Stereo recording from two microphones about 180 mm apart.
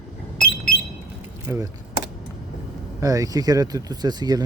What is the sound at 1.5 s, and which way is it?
Speech, 20° right (ahead or behind).